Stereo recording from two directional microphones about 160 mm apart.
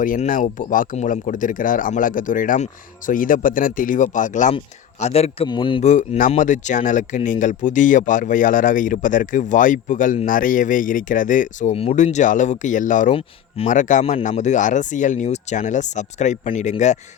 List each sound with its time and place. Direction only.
0.0 s speech: 55° left (ahead or behind); by 5.5 s 40° left (ahead or behind)
5.5 s speech: 30° left (ahead or behind)
5.8 s speech: 50° left (ahead or behind)